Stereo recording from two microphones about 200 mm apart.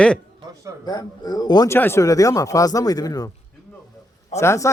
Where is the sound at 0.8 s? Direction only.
20° left (ahead or behind).